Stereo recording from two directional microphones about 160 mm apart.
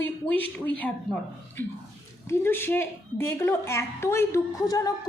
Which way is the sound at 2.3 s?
15° left (ahead or behind).